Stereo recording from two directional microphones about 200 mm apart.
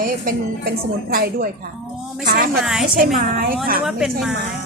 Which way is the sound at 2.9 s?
45° right (ahead or behind).